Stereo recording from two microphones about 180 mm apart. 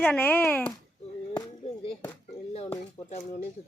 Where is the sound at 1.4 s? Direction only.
30° left (ahead or behind).